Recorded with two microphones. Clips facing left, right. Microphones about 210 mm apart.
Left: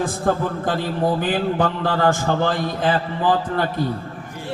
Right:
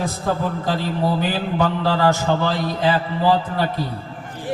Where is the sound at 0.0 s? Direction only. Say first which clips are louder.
Left 2 dB; 50° left (ahead or behind).